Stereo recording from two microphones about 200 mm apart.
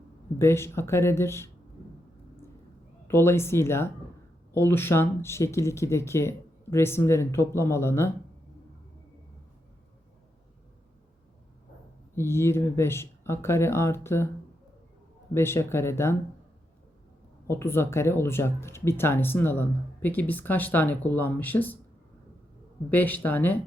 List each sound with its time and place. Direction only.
0.3 s speech: 10° left (ahead or behind)
3.1 s speech: 10° left (ahead or behind)
12.1 s speech: 10° left (ahead or behind)
15.3 s speech: 10° left (ahead or behind)
17.4 s speech: 15° left (ahead or behind)
22.9 s speech: 10° left (ahead or behind)